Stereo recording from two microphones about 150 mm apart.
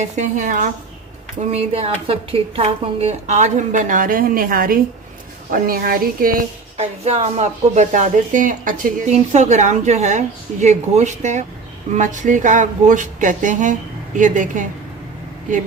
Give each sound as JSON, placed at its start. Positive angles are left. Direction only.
{"t": 0.0, "sound": "a woman's voice", "side_deg": -55}
{"t": 1.4, "sound": "a woman's voice", "side_deg": -45}
{"t": 6.7, "sound": "a woman's voice", "side_deg": -45}